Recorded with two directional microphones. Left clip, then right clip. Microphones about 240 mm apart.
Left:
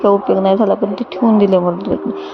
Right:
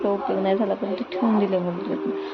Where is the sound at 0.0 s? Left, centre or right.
Left.